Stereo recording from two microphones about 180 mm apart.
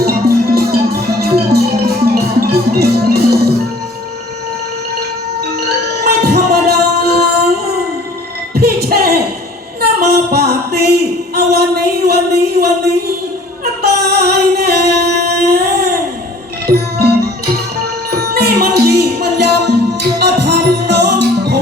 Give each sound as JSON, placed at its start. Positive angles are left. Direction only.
{"t": 0.0, "sound": "music", "side_deg": -60}
{"t": 5.5, "sound": "music", "side_deg": -65}
{"t": 9.8, "sound": "a sound", "side_deg": -60}
{"t": 13.8, "sound": "singing", "side_deg": -60}
{"t": 16.6, "sound": "music", "side_deg": -60}